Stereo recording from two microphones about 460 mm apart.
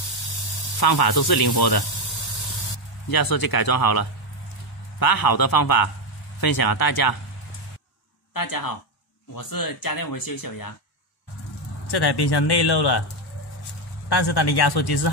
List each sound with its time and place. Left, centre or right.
0.7 s speech: left
3.1 s speech: left
8.3 s speech: left
11.9 s speech: left
14.0 s speech: left